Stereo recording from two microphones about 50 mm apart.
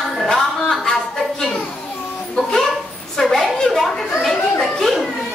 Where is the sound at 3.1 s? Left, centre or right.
Centre.